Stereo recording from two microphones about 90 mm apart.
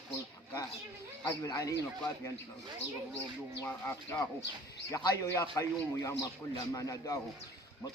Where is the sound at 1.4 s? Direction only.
40° left (ahead or behind).